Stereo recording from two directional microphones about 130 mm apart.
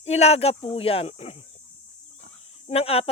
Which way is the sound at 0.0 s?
55° left (ahead or behind).